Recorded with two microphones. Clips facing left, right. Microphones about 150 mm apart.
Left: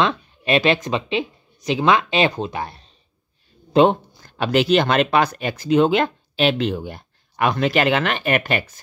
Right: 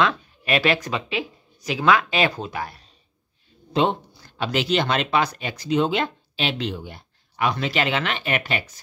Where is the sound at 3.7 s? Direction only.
50° left (ahead or behind).